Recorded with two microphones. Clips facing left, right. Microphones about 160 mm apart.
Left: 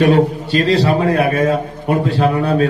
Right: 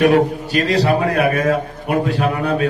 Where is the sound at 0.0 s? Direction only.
30° left (ahead or behind).